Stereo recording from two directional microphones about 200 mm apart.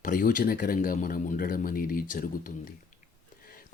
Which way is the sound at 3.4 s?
45° left (ahead or behind).